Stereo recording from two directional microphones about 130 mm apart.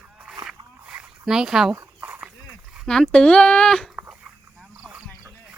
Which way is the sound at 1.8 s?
15° right (ahead or behind).